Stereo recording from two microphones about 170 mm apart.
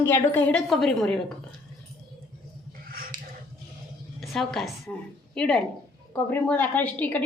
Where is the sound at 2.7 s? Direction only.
60° right (ahead or behind).